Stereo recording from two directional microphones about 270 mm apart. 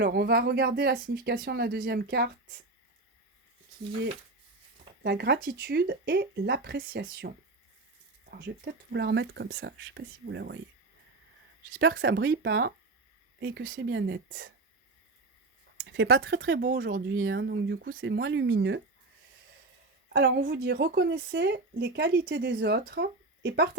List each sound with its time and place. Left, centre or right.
0.0 s speech: right
5.0 s speech: right
11.7 s speech: right
15.8 s speech: right
20.1 s speech: right